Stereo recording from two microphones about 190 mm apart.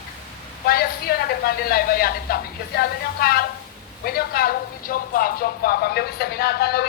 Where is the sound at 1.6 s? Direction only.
50° left (ahead or behind).